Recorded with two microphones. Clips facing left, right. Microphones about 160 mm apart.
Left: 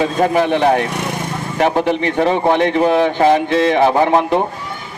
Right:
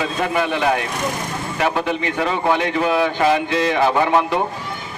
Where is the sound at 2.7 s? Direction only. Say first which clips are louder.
Left 5 dB; 25° left (ahead or behind).